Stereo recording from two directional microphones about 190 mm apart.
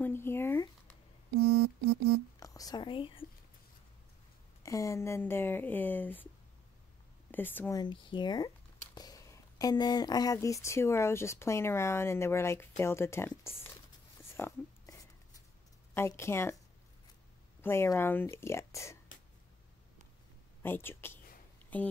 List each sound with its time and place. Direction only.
0.0 s a sound: 10° left (ahead or behind)
2.4 s speech: 20° left (ahead or behind)
4.6 s speech: 15° left (ahead or behind)
7.2 s speech: 10° left (ahead or behind)
7.8 s speech: 25° left (ahead or behind)
14.3 s a sound: 15° left (ahead or behind)
15.9 s speech: 15° left (ahead or behind)
17.6 s speech: 15° left (ahead or behind)
20.6 s speech: 10° left (ahead or behind)